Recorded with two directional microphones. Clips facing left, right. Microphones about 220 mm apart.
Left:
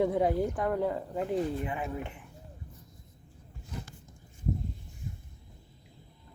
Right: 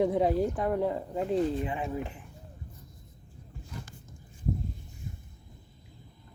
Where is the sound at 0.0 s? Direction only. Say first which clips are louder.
Right 1 dB; 20° right (ahead or behind).